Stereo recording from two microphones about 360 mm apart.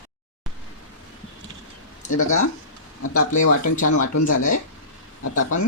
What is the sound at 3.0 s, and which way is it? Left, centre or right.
Speech, left.